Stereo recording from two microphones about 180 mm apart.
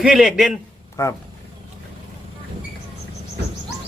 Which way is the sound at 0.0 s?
Centre (ahead or behind).